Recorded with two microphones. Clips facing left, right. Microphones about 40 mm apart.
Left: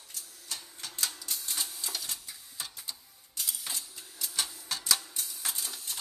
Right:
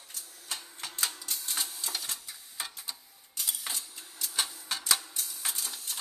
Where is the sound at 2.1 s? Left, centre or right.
Centre.